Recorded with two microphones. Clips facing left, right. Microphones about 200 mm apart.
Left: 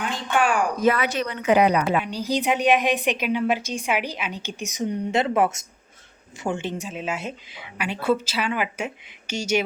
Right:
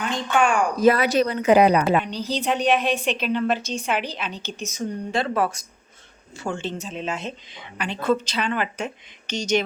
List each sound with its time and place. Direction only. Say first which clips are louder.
0.0 s speech: right 2 dB; 5° left (ahead or behind)
0.8 s a woman's voice: right 7 dB; 35° right (ahead or behind)
2.0 s a woman's voice: left 1 dB; 10° left (ahead or behind)